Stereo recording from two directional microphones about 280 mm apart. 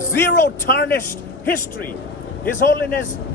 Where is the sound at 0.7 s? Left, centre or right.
Left.